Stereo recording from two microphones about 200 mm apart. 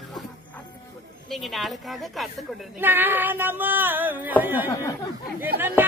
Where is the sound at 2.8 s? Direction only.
10° right (ahead or behind).